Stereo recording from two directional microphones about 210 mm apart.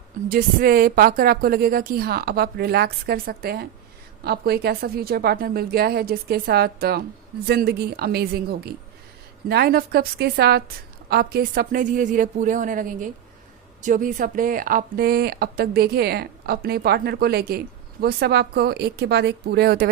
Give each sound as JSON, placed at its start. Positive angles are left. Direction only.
{"t": 0.3, "sound": "speech", "side_deg": -45}